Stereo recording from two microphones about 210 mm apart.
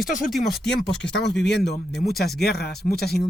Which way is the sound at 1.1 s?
55° left (ahead or behind).